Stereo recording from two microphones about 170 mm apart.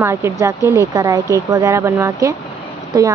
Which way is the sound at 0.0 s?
15° right (ahead or behind).